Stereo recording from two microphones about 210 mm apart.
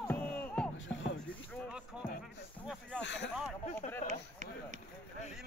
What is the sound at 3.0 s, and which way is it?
Speech, 55° left (ahead or behind).